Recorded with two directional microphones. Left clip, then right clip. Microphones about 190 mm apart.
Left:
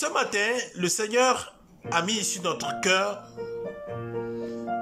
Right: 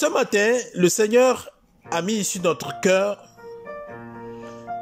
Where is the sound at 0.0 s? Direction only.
20° right (ahead or behind).